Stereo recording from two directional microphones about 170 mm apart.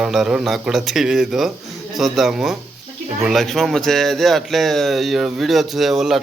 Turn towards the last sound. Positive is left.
turn(degrees=0)  # may be behind; listen again after turning